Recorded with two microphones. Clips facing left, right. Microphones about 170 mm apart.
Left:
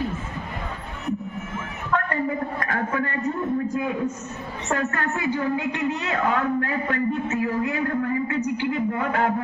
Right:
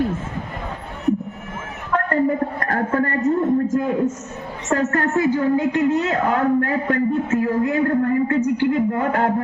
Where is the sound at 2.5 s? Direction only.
45° right (ahead or behind).